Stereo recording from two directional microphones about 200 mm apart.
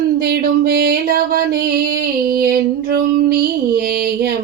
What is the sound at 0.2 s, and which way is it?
Music, 50° right (ahead or behind).